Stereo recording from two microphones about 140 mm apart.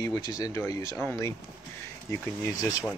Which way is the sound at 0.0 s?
25° left (ahead or behind).